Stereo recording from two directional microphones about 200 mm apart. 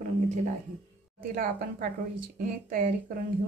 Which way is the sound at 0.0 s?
35° right (ahead or behind).